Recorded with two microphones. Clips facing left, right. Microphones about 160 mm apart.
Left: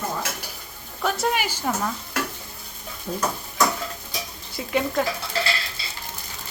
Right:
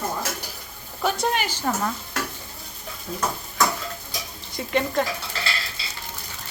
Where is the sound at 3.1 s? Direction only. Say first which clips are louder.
Left 4 dB; 30° left (ahead or behind).